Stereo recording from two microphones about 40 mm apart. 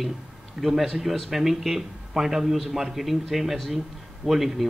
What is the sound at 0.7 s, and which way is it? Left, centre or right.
A man's voice, centre.